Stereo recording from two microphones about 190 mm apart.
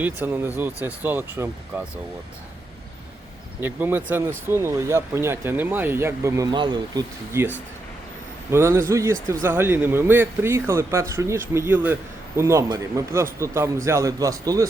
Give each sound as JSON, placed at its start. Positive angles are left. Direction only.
{"t": 0.0, "sound": "speech", "side_deg": -10}
{"t": 3.6, "sound": "speech", "side_deg": -10}
{"t": 8.4, "sound": "speech", "side_deg": -15}